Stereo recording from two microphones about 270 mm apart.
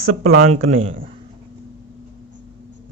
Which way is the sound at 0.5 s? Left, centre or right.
Right.